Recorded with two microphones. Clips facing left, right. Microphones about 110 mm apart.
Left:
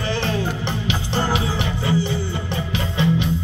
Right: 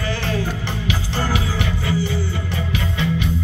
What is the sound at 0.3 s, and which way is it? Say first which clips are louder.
Music: left 1 dB; 20° left (ahead or behind).